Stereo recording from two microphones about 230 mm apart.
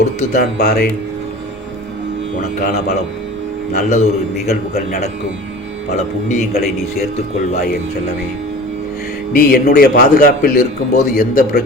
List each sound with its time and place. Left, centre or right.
0.2 s a man's voice: left
2.4 s a man's voice: left
6.2 s a man's voice: left
9.3 s a man's voice: left